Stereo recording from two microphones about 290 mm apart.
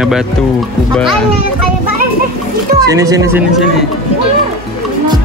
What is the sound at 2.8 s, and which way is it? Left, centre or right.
Speech, centre.